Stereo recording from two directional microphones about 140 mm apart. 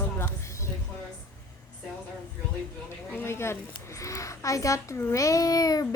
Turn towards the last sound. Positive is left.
turn(degrees=25)  # may be behind; listen again after turning